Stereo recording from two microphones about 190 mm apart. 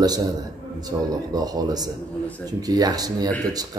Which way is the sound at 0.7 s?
20° right (ahead or behind).